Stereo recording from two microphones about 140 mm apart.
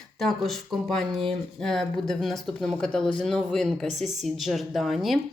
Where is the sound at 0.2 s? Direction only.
Centre (ahead or behind).